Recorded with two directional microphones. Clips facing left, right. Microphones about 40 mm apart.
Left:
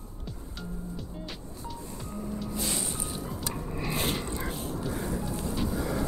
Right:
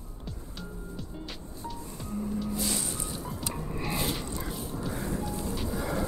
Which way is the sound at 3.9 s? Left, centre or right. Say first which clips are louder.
Left 2 dB; left.